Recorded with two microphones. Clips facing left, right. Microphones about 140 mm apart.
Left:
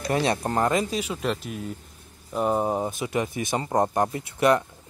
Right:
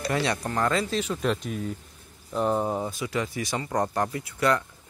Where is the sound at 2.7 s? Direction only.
20° left (ahead or behind).